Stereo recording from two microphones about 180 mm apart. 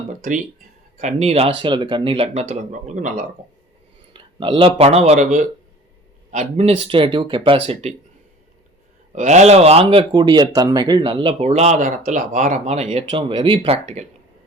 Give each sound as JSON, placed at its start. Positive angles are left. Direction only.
{"t": 0.2, "sound": "speech", "side_deg": -45}
{"t": 1.5, "sound": "speech", "side_deg": -25}
{"t": 4.1, "sound": "speech", "side_deg": -30}
{"t": 9.1, "sound": "speech", "side_deg": -40}